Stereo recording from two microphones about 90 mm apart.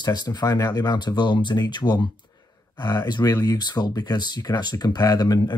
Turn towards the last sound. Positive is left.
turn(degrees=50)  # may be behind; listen again after turning